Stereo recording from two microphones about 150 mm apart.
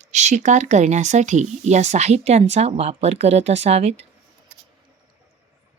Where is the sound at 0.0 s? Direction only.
50° right (ahead or behind).